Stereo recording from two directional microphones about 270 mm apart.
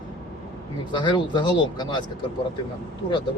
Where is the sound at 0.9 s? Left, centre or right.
Centre.